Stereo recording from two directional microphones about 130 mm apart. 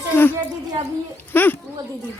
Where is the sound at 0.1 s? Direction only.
15° left (ahead or behind).